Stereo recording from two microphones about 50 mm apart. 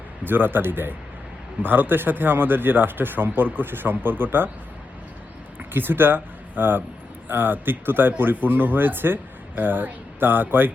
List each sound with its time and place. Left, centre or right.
0.3 s speech: right
5.5 s speech: right